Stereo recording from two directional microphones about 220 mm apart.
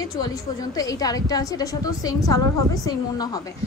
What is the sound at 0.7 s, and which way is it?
A woman's voice, 15° left (ahead or behind).